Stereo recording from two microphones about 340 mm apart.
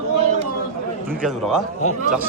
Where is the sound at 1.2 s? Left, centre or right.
Centre.